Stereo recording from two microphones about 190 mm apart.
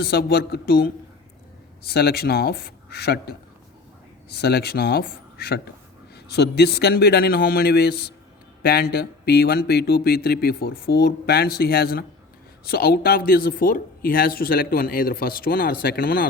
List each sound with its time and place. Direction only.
0.0 s speech: 55° left (ahead or behind)
1.9 s speech: 60° left (ahead or behind)
4.4 s speech: 60° left (ahead or behind)